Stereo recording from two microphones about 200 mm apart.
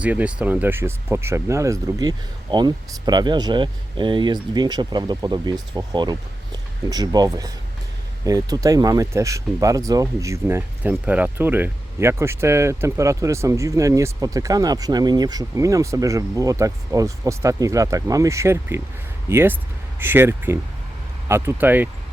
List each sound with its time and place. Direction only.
0.0 s speech: 5° right (ahead or behind)